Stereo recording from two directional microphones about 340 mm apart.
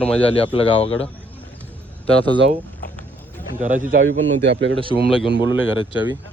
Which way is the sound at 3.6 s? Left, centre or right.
Right.